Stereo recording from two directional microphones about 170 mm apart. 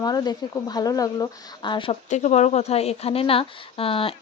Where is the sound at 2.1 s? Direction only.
40° left (ahead or behind).